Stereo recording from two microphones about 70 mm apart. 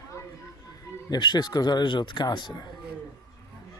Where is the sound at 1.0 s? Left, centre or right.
Left.